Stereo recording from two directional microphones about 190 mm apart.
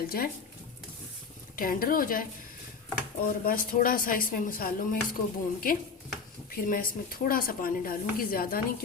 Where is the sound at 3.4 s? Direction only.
50° left (ahead or behind).